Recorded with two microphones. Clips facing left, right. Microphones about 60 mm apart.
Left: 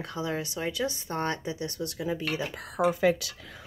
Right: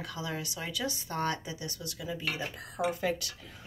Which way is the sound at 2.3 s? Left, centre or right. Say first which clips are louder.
Left 4 dB; left.